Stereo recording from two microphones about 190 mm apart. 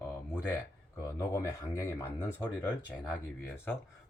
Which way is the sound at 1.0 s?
15° left (ahead or behind).